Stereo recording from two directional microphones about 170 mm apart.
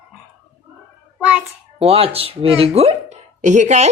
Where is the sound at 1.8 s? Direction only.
35° right (ahead or behind).